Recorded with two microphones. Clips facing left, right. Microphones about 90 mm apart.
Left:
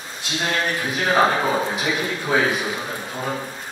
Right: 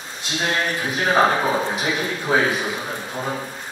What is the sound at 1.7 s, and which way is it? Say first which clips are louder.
Speech: even; 10° right (ahead or behind).